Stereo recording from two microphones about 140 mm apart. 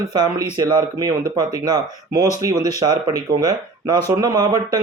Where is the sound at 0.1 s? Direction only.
30° right (ahead or behind).